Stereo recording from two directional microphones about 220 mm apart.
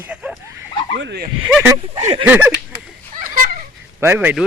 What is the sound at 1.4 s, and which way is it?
Speech, 5° right (ahead or behind).